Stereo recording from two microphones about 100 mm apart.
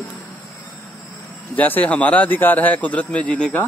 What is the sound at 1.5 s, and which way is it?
Speech, 15° left (ahead or behind).